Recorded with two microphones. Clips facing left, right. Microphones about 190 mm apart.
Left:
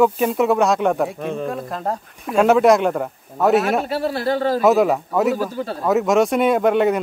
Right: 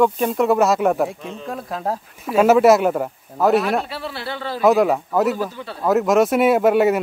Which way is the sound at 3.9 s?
45° left (ahead or behind).